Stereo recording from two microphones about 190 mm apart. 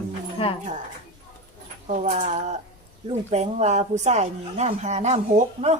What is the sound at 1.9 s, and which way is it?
Speech, 40° right (ahead or behind).